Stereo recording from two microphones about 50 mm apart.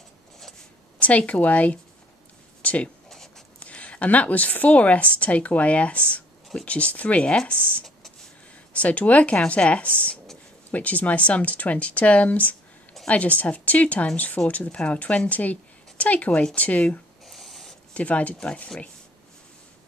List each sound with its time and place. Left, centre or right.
0.9 s speech: left
3.1 s writing: centre
3.5 s speech: left
17.2 s a sound: centre
17.9 s speech: left